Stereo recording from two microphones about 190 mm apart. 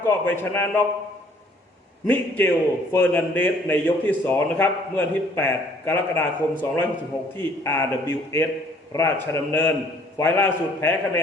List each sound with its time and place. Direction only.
0.0 s a man's voice: 10° left (ahead or behind)
2.0 s a man's voice: 10° left (ahead or behind)